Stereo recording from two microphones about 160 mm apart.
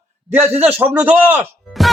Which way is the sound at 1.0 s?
10° right (ahead or behind).